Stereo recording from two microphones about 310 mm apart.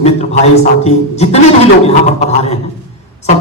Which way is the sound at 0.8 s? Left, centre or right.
Left.